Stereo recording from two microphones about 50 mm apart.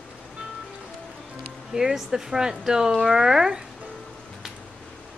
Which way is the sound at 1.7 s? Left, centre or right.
Centre.